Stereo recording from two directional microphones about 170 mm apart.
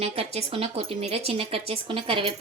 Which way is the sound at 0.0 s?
35° right (ahead or behind).